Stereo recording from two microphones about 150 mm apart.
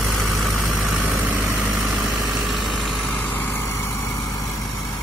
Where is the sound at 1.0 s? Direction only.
15° right (ahead or behind).